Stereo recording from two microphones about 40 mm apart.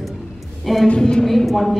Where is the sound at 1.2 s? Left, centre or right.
Centre.